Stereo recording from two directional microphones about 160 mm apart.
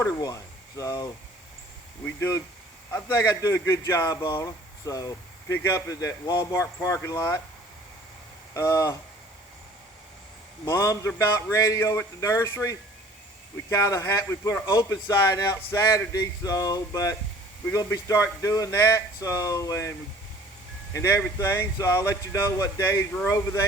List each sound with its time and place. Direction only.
0.0 s speech: 20° left (ahead or behind)
2.0 s speech: 15° left (ahead or behind)
8.5 s speech: 20° left (ahead or behind)
10.7 s speech: 20° left (ahead or behind)